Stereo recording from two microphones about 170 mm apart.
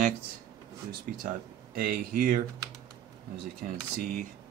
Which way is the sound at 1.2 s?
60° right (ahead or behind).